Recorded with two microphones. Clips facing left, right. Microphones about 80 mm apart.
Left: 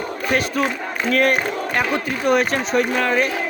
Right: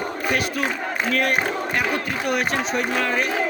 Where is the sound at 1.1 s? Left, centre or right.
Left.